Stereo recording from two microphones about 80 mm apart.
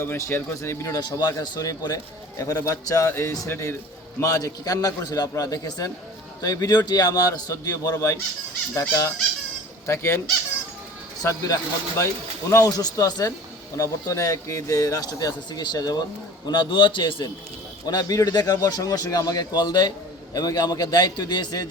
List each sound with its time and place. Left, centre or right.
0.3 s speech: left
0.9 s speech: left
3.1 s speech: left
4.2 s speech: left
9.8 s speech: left
11.2 s speech: left
16.5 s a man's voice: left
17.8 s speech: left